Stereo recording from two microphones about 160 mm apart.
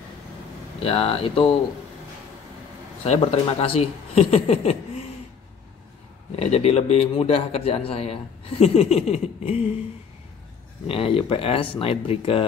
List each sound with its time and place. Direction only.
0.8 s a man's voice: 35° left (ahead or behind)
3.1 s a man's voice: 40° left (ahead or behind)
6.4 s a man's voice: 40° left (ahead or behind)
10.9 s a man's voice: 35° left (ahead or behind)